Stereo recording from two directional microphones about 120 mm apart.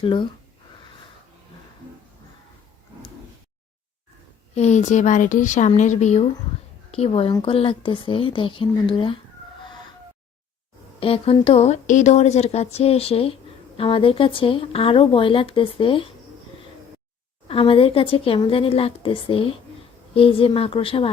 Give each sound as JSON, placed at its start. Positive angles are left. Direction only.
{"t": 0.0, "sound": "speech", "side_deg": 45}
{"t": 4.5, "sound": "a woman's voice", "side_deg": 70}
{"t": 6.9, "sound": "speech", "side_deg": 55}
{"t": 11.0, "sound": "speech", "side_deg": 50}
{"t": 11.4, "sound": "speech", "side_deg": 60}
{"t": 17.5, "sound": "speech", "side_deg": 50}